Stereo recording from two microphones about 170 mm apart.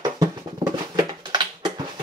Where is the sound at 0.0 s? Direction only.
25° right (ahead or behind).